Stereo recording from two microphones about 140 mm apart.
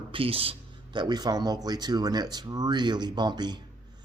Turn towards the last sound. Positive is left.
turn(degrees=-30)  # may be behind; listen again after turning